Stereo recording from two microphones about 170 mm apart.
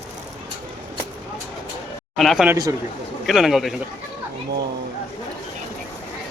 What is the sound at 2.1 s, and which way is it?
A man's voice, centre (ahead or behind).